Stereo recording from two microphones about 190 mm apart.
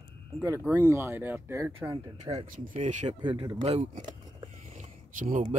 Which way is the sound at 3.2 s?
30° right (ahead or behind).